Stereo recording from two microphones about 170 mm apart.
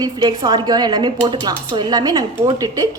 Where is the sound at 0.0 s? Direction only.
25° right (ahead or behind).